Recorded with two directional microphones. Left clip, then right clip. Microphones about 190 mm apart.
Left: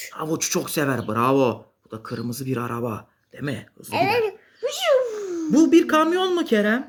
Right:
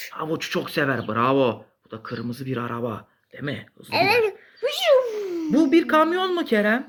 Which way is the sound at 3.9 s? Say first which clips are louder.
Right 2 dB; 15° right (ahead or behind).